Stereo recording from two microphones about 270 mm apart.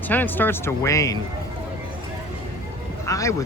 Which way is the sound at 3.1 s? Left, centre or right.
Centre.